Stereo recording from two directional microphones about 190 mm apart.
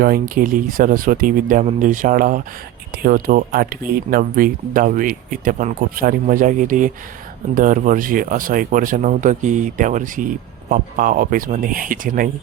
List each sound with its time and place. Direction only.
0.0 s speech: 50° right (ahead or behind)